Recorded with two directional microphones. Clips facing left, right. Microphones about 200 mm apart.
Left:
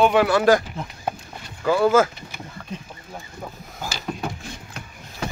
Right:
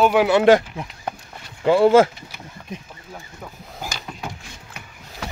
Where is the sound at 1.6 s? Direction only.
30° right (ahead or behind).